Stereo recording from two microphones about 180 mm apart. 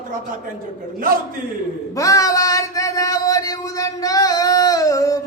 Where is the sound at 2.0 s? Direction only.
20° left (ahead or behind).